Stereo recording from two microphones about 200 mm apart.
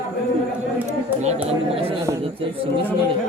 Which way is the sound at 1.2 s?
30° right (ahead or behind).